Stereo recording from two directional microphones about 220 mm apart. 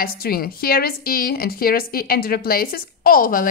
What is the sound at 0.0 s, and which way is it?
A woman's voice, 40° left (ahead or behind).